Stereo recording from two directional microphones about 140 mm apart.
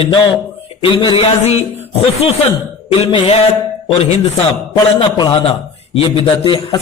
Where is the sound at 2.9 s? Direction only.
45° left (ahead or behind).